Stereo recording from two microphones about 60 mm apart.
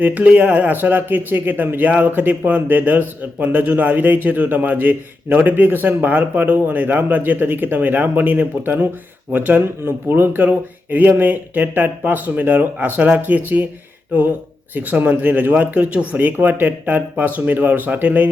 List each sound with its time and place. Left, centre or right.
0.0 s speech: right